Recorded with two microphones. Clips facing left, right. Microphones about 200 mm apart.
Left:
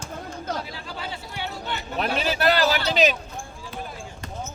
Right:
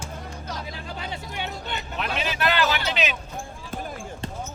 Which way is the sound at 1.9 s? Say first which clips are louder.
Left 5 dB; 35° left (ahead or behind).